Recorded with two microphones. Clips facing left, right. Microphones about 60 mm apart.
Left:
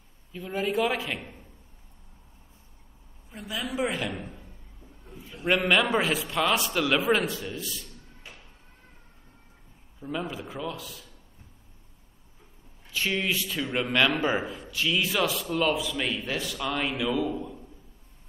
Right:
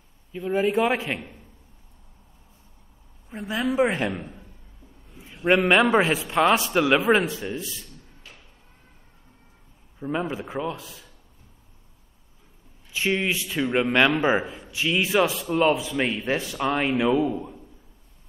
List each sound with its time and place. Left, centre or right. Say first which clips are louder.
0.3 s a man's voice: right 6 dB; right
3.3 s a man's voice: right 8 dB; right
9.9 s a man's voice: right 5 dB; right
12.9 s a man's voice: right 3 dB; right